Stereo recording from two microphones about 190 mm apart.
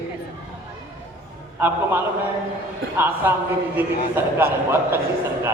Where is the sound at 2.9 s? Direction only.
10° right (ahead or behind).